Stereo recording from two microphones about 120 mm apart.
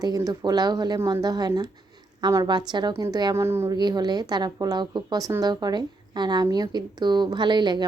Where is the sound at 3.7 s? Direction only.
35° right (ahead or behind).